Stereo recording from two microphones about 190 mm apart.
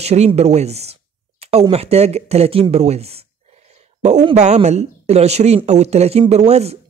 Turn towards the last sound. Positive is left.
turn(degrees=-35)  # may be behind; listen again after turning